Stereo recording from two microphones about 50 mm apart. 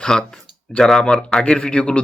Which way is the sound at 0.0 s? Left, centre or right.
Centre.